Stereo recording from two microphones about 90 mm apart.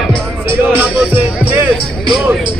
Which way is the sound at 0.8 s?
15° right (ahead or behind).